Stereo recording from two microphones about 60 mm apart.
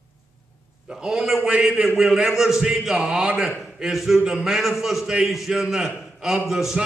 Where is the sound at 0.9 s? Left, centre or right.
Centre.